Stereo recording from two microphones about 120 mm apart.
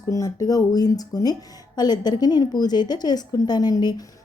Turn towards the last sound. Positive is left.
turn(degrees=35)  # may be behind; listen again after turning